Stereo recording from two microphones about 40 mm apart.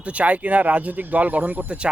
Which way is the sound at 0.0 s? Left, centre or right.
Right.